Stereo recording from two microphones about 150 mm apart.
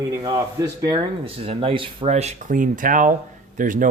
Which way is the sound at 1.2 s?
40° right (ahead or behind).